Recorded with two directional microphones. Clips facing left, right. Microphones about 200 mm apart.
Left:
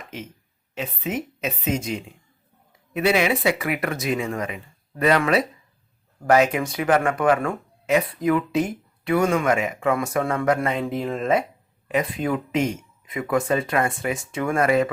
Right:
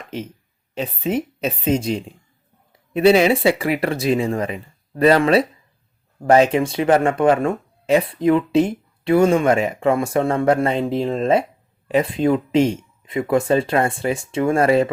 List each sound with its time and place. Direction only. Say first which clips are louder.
0.7 s speech: right 6 dB; 35° right (ahead or behind)